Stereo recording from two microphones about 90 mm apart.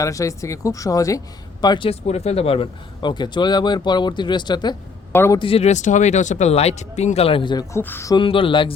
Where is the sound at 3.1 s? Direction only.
55° left (ahead or behind).